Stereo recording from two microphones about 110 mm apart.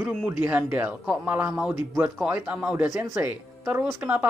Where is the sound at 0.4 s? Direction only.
15° right (ahead or behind).